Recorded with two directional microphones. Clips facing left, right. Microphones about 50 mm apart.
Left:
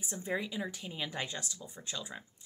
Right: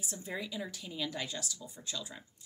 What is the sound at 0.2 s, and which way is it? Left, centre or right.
Speech, centre.